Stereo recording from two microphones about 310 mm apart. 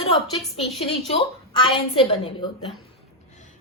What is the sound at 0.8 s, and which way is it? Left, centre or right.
A woman's voice, centre.